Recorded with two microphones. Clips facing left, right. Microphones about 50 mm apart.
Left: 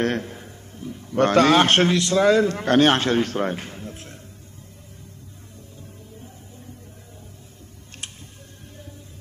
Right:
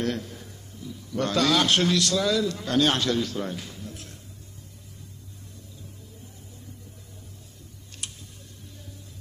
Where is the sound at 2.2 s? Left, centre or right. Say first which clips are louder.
Left 8 dB; left.